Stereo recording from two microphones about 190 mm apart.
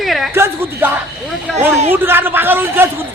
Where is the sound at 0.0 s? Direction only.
Centre (ahead or behind).